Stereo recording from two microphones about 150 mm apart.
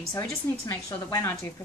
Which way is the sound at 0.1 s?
15° left (ahead or behind).